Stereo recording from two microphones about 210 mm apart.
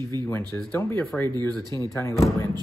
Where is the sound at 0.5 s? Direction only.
10° left (ahead or behind).